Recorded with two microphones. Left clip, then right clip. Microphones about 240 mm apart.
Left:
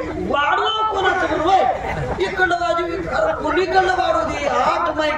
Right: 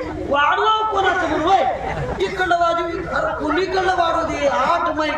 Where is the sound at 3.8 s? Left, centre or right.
Right.